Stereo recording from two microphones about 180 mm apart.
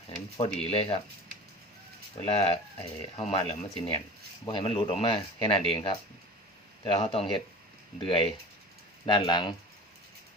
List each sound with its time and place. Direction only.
0.3 s speech: 35° left (ahead or behind)
2.2 s speech: 35° left (ahead or behind)